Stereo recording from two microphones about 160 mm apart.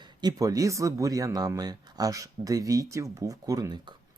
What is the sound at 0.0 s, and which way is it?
Speech, 25° right (ahead or behind).